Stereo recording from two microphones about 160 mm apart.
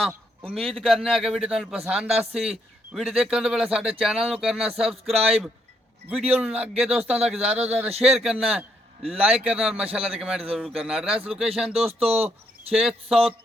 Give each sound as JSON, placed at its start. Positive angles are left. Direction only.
{"t": 0.4, "sound": "a man's voice", "side_deg": 0}
{"t": 12.0, "sound": "speech", "side_deg": -40}
{"t": 12.7, "sound": "a man's voice", "side_deg": 0}